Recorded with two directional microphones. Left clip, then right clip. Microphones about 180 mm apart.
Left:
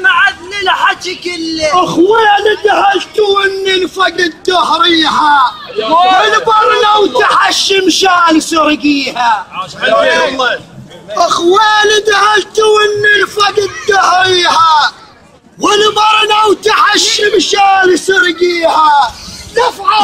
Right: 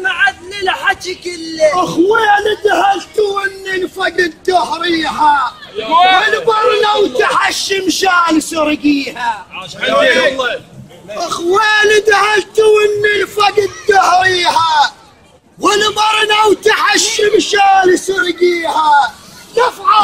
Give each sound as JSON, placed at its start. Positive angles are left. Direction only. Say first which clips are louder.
{"t": 0.0, "sound": "a sound", "louder": "left 5 dB", "side_deg": -10}
{"t": 1.8, "sound": "speech", "louder": "left 3 dB", "side_deg": -25}
{"t": 4.0, "sound": "a man's voice", "louder": "left 3 dB", "side_deg": 5}
{"t": 5.8, "sound": "a man's voice", "louder": "left 1 dB", "side_deg": -40}
{"t": 6.4, "sound": "speech", "louder": "left 3 dB", "side_deg": 0}
{"t": 9.6, "sound": "a man's voice", "louder": "right 2 dB", "side_deg": -40}
{"t": 11.1, "sound": "a man's voice", "louder": "left 6 dB", "side_deg": 25}
{"t": 19.5, "sound": "a man's voice", "louder": "left 1 dB", "side_deg": 10}